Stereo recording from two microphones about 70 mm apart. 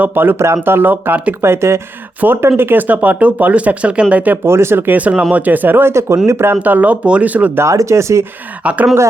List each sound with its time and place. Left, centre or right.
0.0 s speech: right
1.4 s speech: right
2.2 s speech: right
4.4 s speech: right
4.9 s speech: centre
5.9 s speech: right
6.6 s speech: right
7.6 s speech: right
8.6 s speech: centre